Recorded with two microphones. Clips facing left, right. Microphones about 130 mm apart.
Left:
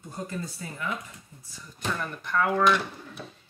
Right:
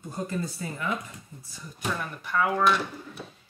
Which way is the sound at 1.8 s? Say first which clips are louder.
Even; 10° right (ahead or behind).